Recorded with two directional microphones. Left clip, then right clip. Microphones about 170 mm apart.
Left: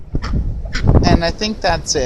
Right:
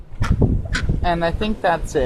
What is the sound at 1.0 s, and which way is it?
Speech, 15° left (ahead or behind).